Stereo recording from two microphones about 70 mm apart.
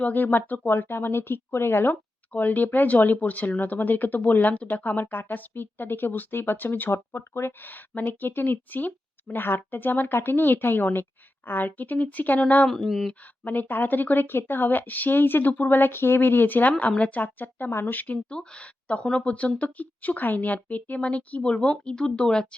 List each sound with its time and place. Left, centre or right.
0.0 s speech: left
6.9 s speech: left
12.6 s speech: centre
13.1 s speech: left